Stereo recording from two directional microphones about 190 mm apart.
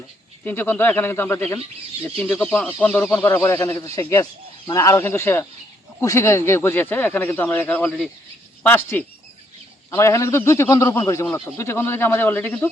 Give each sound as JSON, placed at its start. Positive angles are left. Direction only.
{"t": 0.4, "sound": "a man's voice", "side_deg": 10}